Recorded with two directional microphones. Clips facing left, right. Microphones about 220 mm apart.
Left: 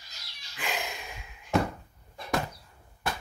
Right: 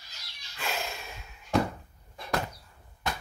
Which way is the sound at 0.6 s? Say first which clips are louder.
Even; 15° left (ahead or behind).